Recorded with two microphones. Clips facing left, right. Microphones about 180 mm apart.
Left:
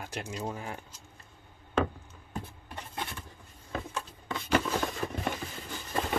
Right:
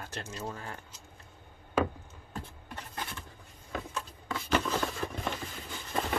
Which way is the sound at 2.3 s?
15° left (ahead or behind).